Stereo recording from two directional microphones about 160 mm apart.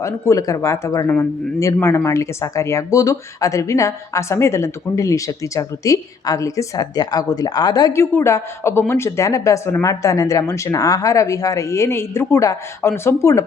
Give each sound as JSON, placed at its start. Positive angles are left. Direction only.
{"t": 0.0, "sound": "a woman's voice", "side_deg": 20}